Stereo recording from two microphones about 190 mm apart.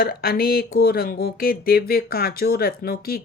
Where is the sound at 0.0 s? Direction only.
55° left (ahead or behind).